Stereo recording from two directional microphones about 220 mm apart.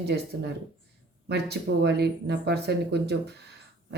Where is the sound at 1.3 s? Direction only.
50° right (ahead or behind).